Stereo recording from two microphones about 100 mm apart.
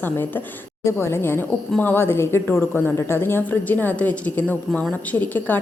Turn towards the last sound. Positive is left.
turn(degrees=20)  # may be behind; listen again after turning